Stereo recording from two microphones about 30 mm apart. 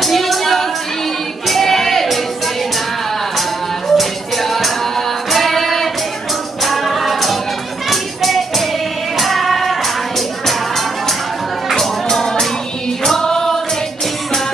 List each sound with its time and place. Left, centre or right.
0.0 s music: centre
1.5 s a sound: centre
3.9 s music: centre
11.7 s music: centre
13.0 s choir: centre
13.3 s music: centre